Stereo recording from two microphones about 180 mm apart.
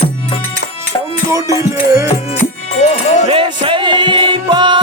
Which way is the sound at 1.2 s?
15° right (ahead or behind).